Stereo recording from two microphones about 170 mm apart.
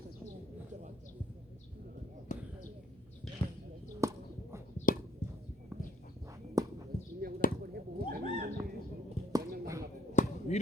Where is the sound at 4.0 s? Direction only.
15° right (ahead or behind).